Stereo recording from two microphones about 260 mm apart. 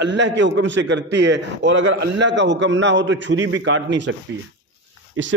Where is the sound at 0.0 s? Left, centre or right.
Right.